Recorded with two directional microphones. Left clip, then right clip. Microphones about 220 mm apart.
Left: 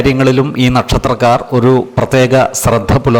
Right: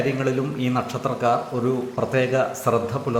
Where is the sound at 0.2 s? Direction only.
45° left (ahead or behind).